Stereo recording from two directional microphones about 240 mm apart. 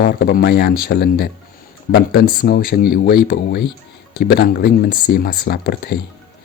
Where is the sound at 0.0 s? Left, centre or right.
Left.